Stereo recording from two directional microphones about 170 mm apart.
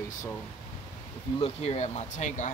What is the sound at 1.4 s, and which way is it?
Speech, 40° left (ahead or behind).